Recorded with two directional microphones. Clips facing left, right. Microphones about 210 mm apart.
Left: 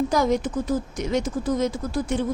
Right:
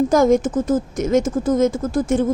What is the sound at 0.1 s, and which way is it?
Speech, 50° right (ahead or behind).